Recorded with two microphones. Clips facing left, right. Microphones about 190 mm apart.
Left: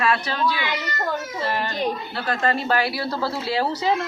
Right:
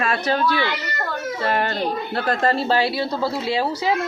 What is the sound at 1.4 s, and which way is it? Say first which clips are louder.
Speech: right 4 dB; 55° right (ahead or behind).